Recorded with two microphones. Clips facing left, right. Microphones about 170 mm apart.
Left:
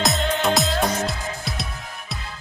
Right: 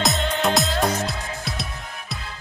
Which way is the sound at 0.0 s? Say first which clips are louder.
Left 1 dB; centre (ahead or behind).